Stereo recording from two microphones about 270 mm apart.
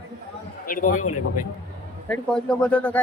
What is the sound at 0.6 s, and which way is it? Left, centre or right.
Speech, left.